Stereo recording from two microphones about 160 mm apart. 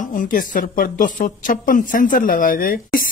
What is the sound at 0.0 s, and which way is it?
Speech, 55° left (ahead or behind).